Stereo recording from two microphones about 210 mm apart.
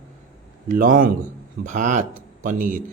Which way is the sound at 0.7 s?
40° right (ahead or behind).